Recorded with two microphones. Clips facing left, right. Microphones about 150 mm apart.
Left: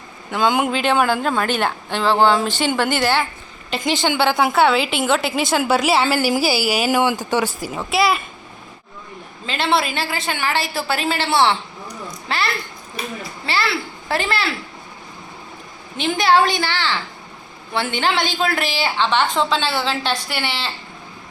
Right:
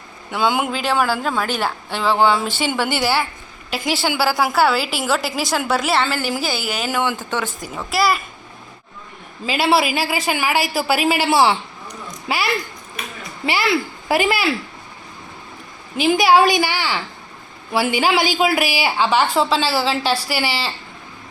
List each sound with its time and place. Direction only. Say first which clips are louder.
0.3 s a woman's voice: left 1 dB; 5° right (ahead or behind)
9.5 s a woman's voice: right 3 dB; 10° right (ahead or behind)
13.0 s speech: left 4 dB; 30° left (ahead or behind)
13.4 s speech: right 4 dB; 15° right (ahead or behind)
16.0 s a woman's voice: right 3 dB; 10° right (ahead or behind)